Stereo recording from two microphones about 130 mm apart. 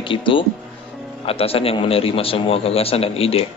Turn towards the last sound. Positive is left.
turn(degrees=50)  # may be behind; listen again after turning